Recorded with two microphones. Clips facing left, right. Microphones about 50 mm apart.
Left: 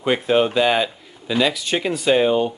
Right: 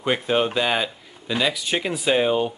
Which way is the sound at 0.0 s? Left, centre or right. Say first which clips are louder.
Left 4 dB; centre.